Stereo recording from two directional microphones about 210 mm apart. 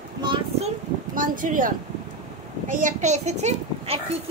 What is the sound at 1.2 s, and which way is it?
A child's voice, 40° right (ahead or behind).